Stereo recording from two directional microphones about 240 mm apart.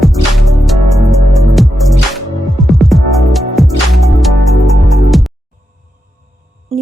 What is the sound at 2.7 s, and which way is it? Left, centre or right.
Music, centre.